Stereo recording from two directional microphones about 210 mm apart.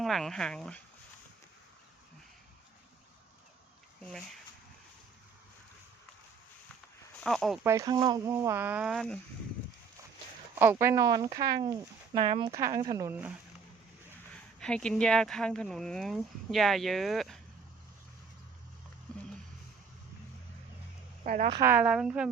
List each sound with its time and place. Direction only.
0.0 s speech: centre (ahead or behind)
7.2 s speech: centre (ahead or behind)
7.6 s speech: 15° right (ahead or behind)
10.6 s speech: 10° right (ahead or behind)
14.6 s speech: 5° left (ahead or behind)
21.2 s speech: 40° right (ahead or behind)
21.5 s speech: 10° right (ahead or behind)